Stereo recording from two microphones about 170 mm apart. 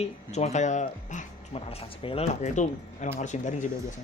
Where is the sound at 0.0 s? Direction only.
40° left (ahead or behind).